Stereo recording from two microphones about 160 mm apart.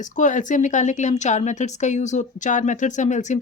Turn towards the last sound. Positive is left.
turn(degrees=50)  # may be behind; listen again after turning